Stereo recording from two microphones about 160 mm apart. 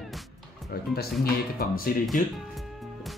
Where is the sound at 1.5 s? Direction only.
65° left (ahead or behind).